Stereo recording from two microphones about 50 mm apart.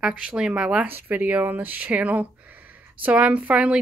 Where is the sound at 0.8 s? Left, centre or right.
Right.